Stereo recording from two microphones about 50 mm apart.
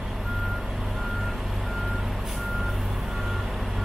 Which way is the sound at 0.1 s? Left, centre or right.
Centre.